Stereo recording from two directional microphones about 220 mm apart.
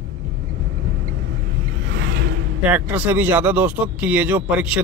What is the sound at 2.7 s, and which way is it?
Speech, 10° right (ahead or behind).